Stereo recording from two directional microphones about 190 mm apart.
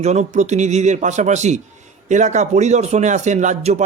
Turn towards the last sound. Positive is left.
turn(degrees=-40)  # may be behind; listen again after turning